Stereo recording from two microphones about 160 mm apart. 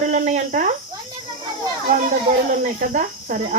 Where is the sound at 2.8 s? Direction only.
55° right (ahead or behind).